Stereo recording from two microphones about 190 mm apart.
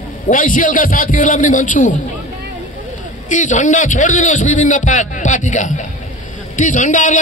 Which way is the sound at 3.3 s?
40° left (ahead or behind).